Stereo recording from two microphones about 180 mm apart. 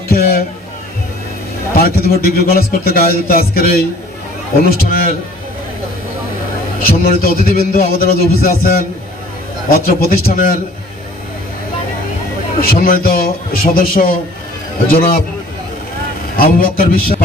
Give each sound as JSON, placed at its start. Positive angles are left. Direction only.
{"t": 0.1, "sound": "speech", "side_deg": 60}
{"t": 1.7, "sound": "speech", "side_deg": 55}
{"t": 6.8, "sound": "a man's voice", "side_deg": 55}
{"t": 12.5, "sound": "speech", "side_deg": 55}
{"t": 16.3, "sound": "a man's voice", "side_deg": 55}